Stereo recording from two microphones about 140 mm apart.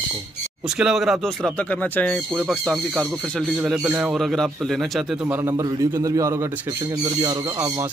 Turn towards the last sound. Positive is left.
turn(degrees=-25)  # may be behind; listen again after turning